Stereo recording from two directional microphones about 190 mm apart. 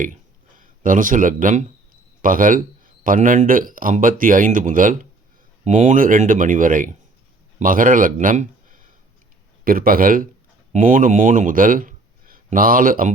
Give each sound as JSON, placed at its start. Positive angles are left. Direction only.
{"t": 0.6, "sound": "speech", "side_deg": -45}